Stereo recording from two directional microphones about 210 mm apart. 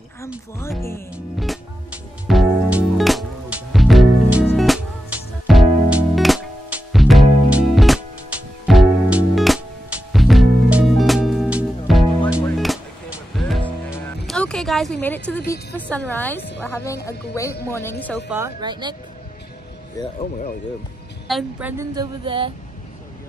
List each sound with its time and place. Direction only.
1.1 s music: 5° right (ahead or behind)
14.2 s a sound: 5° left (ahead or behind)
15.5 s a woman's voice: 10° left (ahead or behind)
18.3 s speech: 15° right (ahead or behind)
20.0 s speech: 30° left (ahead or behind)
21.3 s a woman's voice: 5° right (ahead or behind)
21.9 s speech: 25° right (ahead or behind)